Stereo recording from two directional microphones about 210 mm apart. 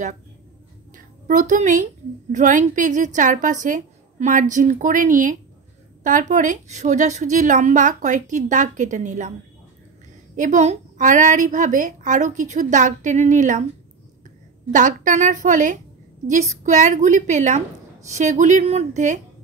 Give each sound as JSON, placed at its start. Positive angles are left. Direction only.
{"t": 0.9, "sound": "a woman's voice", "side_deg": -40}
{"t": 10.3, "sound": "a woman's voice", "side_deg": -35}
{"t": 14.7, "sound": "a woman's voice", "side_deg": -40}